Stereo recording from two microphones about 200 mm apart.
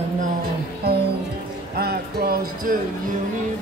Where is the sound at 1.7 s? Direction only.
50° right (ahead or behind).